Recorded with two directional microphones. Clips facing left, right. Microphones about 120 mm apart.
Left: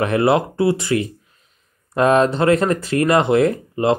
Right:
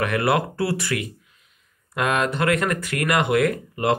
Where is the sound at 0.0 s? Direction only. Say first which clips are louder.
Left 5 dB; 25° left (ahead or behind).